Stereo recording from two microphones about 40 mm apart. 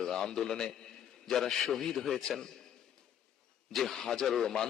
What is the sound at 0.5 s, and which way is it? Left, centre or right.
Speech, centre.